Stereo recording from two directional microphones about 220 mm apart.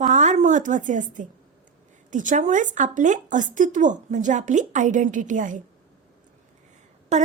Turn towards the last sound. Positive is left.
turn(degrees=-30)  # may be behind; listen again after turning